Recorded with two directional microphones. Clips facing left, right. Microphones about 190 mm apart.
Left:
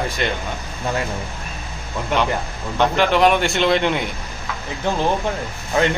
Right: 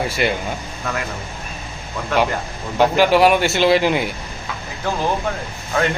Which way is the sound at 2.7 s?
5° right (ahead or behind).